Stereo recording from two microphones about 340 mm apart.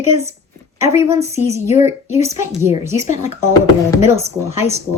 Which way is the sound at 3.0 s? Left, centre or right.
Left.